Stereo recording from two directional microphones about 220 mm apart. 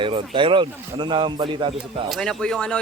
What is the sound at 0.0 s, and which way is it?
A man's voice, 25° right (ahead or behind).